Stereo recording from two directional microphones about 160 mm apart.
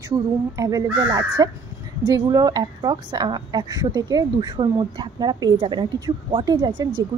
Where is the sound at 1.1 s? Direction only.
25° right (ahead or behind).